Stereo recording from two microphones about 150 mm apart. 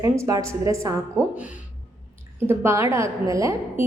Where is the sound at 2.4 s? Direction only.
15° right (ahead or behind).